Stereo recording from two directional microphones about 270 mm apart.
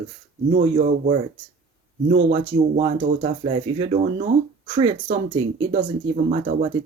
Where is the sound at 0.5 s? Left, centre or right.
Right.